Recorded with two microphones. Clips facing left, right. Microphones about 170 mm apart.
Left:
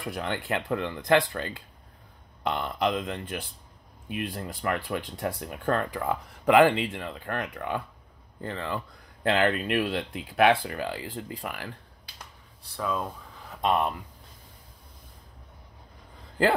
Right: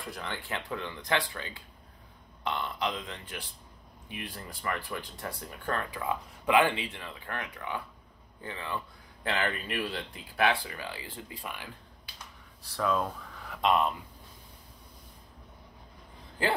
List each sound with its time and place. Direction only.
0.0 s a man's voice: 70° left (ahead or behind); by 3.4 s 55° left (ahead or behind)
4.1 s speech: 65° left (ahead or behind)
8.4 s speech: 75° left (ahead or behind)
9.3 s speech: 65° left (ahead or behind)
11.4 s speech: 60° left (ahead or behind)
12.8 s speech: 10° left (ahead or behind)
13.6 s speech: 50° left (ahead or behind)